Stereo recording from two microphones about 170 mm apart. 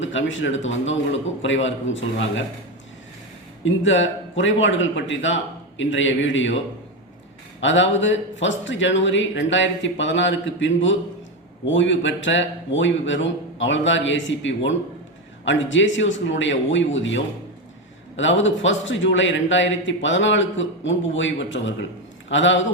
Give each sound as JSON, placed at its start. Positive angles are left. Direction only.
{"t": 0.0, "sound": "a man's voice", "side_deg": 90}
{"t": 3.8, "sound": "a man's voice", "side_deg": 90}
{"t": 7.6, "sound": "a man's voice", "side_deg": 90}